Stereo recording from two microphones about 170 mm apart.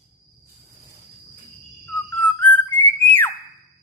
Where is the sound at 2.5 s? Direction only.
10° left (ahead or behind).